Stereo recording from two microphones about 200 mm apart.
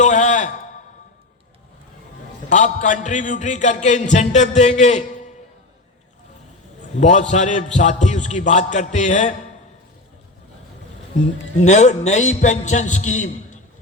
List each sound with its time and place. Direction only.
0.0 s a sound: 35° left (ahead or behind)
2.5 s music: 40° left (ahead or behind)
6.9 s music: 35° left (ahead or behind)
11.5 s music: 35° left (ahead or behind)